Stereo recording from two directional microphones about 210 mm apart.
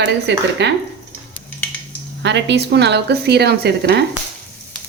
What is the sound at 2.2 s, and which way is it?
A woman's voice, 55° right (ahead or behind).